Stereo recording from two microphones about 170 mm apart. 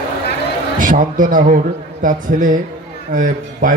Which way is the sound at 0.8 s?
50° right (ahead or behind).